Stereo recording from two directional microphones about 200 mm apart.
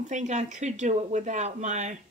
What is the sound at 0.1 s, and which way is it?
Speech, 35° right (ahead or behind).